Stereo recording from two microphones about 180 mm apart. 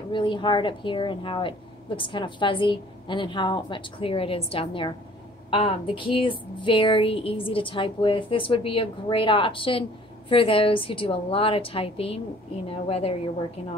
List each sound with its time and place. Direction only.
0.1 s a woman's voice: 25° left (ahead or behind)